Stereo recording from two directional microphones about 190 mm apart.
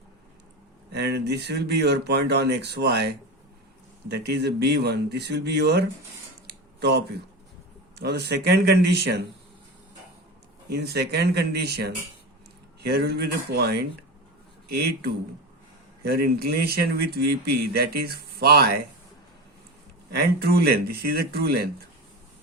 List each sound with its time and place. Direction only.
0.9 s speech: 60° right (ahead or behind)
4.1 s speech: 60° right (ahead or behind)
8.4 s speech: 60° right (ahead or behind)
10.7 s speech: 60° right (ahead or behind)
20.1 s speech: 55° right (ahead or behind)